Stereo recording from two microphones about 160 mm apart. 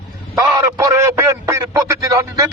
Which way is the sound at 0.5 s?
20° right (ahead or behind).